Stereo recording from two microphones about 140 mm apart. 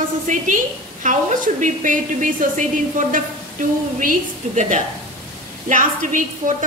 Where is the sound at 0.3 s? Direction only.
60° right (ahead or behind).